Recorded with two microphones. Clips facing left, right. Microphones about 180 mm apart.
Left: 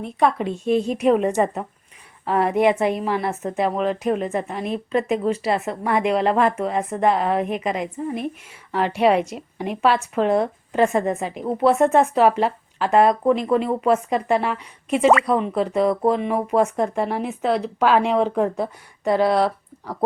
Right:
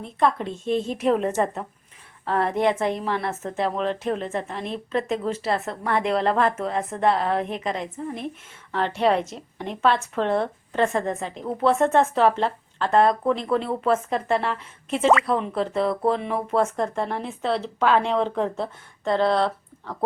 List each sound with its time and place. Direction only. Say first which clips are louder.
0.2 s speech: left 2 dB; 5° left (ahead or behind)
10.7 s a woman's voice: left 4 dB; 15° left (ahead or behind)